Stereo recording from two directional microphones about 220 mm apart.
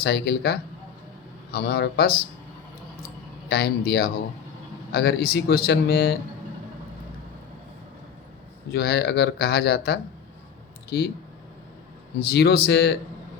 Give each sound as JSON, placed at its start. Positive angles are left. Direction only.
{"t": 0.0, "sound": "speech", "side_deg": 45}
{"t": 3.5, "sound": "speech", "side_deg": 45}
{"t": 8.7, "sound": "speech", "side_deg": 45}
{"t": 12.3, "sound": "speech", "side_deg": 45}